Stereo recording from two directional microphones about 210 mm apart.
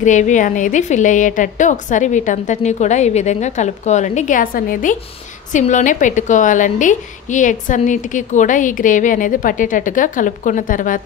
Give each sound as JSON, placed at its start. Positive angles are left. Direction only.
{"t": 0.0, "sound": "a woman's voice", "side_deg": 35}